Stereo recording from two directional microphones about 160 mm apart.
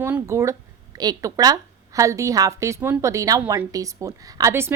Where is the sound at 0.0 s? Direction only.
15° right (ahead or behind).